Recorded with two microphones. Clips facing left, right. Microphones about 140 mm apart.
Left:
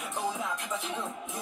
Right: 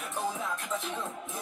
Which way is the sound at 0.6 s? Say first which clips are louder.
Even; 10° left (ahead or behind).